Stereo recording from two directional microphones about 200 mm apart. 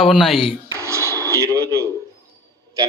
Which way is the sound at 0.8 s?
15° right (ahead or behind).